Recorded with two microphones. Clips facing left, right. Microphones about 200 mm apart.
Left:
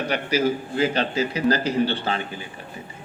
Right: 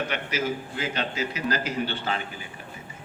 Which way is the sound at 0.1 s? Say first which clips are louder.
Left 6 dB; 35° left (ahead or behind).